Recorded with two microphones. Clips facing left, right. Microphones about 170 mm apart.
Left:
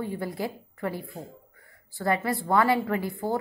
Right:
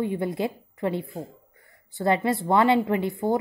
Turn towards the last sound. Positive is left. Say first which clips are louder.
# right 4 dB
turn(degrees=-20)  # may be behind; listen again after turning